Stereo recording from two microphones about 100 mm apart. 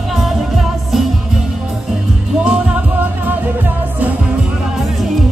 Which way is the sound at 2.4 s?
10° right (ahead or behind).